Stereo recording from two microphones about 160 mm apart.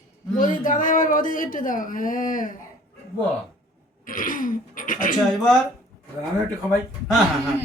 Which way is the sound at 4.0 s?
60° left (ahead or behind).